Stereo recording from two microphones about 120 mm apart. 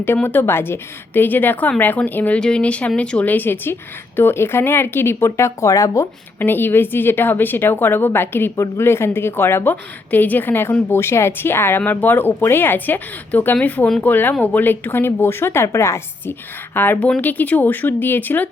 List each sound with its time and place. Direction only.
0.0 s speech: 15° left (ahead or behind)